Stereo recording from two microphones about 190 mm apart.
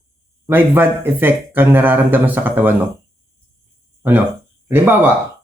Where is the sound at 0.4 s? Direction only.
10° right (ahead or behind).